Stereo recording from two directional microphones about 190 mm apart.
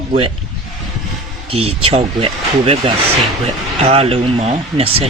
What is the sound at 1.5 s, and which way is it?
Speech, 30° right (ahead or behind).